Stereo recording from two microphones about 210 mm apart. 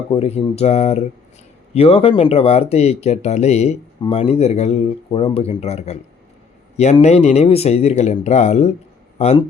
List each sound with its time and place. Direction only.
0.1 s speech: 30° left (ahead or behind)